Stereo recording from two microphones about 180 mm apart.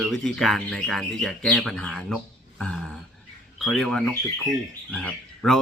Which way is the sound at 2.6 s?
5° left (ahead or behind).